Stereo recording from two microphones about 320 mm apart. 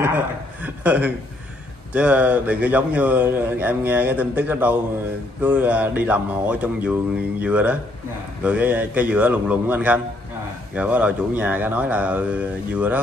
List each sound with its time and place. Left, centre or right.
0.6 s chuckle: centre
2.0 s speech: centre